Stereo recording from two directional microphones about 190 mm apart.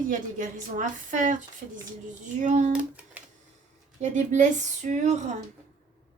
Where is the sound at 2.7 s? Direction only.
10° right (ahead or behind).